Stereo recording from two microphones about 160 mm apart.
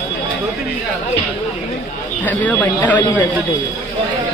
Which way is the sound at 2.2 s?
10° left (ahead or behind).